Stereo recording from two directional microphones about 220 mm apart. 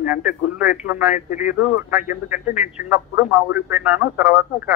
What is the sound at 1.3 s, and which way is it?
Speech, 35° left (ahead or behind).